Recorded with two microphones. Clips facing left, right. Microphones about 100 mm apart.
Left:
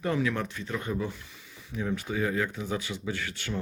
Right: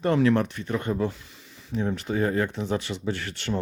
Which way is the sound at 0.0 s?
60° right (ahead or behind).